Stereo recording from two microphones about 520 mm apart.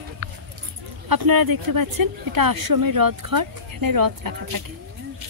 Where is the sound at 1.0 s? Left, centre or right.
Right.